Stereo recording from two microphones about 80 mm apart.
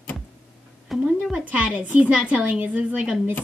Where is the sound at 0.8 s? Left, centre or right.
Centre.